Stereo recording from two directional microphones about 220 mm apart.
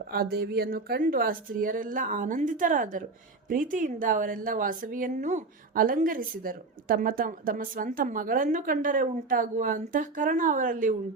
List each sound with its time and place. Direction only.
0.1 s a woman's voice: 45° right (ahead or behind)